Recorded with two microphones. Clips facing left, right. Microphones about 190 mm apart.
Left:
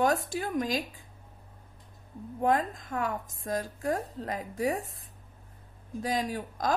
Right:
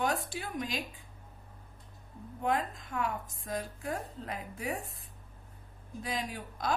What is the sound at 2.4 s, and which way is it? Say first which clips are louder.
A woman's voice: left 5 dB; 45° left (ahead or behind).